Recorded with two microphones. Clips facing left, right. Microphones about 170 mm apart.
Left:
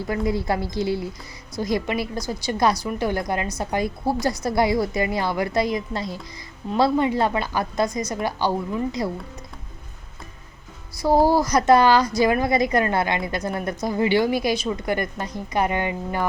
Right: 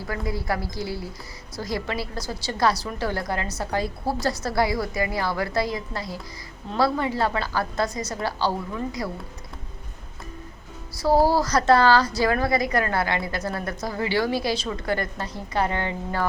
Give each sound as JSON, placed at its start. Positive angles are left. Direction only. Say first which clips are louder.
{"t": 0.1, "sound": "a woman's voice", "louder": "left 4 dB", "side_deg": 20}
{"t": 11.0, "sound": "a woman's voice", "louder": "left 2 dB", "side_deg": 15}